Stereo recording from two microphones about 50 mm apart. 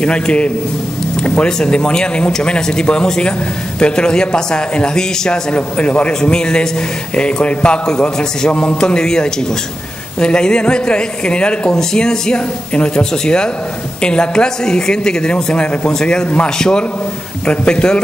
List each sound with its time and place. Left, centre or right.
0.0 s speech: left